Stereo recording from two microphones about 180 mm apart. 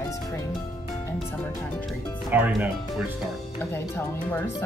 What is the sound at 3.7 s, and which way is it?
Speech, 10° left (ahead or behind).